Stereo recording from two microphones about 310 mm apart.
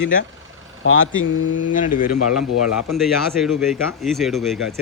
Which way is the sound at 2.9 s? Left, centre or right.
Centre.